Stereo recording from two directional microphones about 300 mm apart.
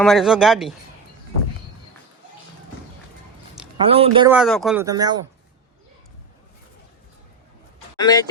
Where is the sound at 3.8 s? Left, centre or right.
Centre.